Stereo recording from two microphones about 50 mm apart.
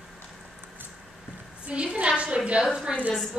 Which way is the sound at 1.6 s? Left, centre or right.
Right.